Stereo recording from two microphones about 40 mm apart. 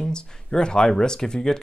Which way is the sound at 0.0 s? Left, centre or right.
Centre.